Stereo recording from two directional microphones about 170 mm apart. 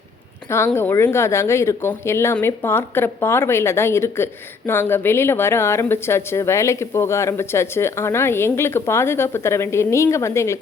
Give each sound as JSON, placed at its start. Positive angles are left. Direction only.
{"t": 0.5, "sound": "a woman's voice", "side_deg": 15}